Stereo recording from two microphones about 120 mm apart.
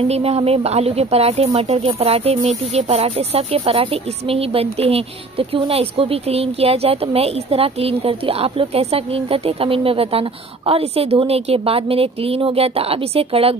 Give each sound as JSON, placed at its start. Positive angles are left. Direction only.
{"t": 0.1, "sound": "speech", "side_deg": -55}